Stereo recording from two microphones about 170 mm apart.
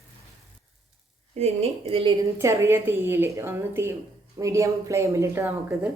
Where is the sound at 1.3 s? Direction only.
40° right (ahead or behind).